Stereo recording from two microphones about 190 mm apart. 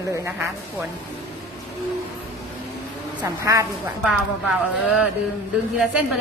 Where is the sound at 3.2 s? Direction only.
20° right (ahead or behind).